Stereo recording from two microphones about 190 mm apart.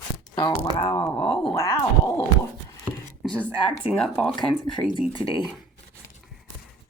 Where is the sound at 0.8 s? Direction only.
10° left (ahead or behind).